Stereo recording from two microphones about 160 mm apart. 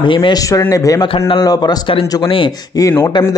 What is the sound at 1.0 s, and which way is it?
A man's voice, 35° left (ahead or behind).